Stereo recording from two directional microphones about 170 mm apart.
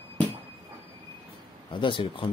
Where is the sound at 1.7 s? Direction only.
30° left (ahead or behind).